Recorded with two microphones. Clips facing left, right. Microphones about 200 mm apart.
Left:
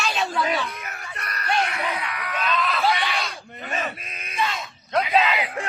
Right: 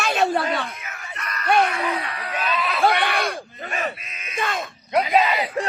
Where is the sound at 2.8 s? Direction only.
60° right (ahead or behind).